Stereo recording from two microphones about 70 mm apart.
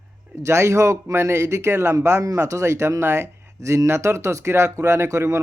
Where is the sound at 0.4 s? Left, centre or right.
Right.